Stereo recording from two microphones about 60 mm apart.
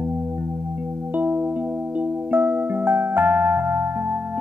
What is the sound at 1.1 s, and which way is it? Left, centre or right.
Music, right.